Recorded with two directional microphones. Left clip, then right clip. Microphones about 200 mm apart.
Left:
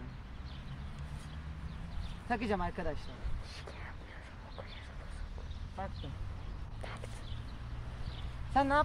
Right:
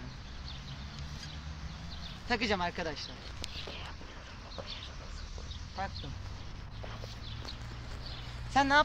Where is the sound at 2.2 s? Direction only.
20° left (ahead or behind).